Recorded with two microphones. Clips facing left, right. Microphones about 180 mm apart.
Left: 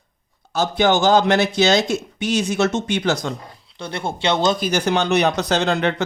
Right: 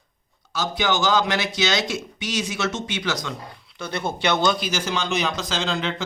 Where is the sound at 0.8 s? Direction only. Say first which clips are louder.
Left 6 dB; 55° left (ahead or behind).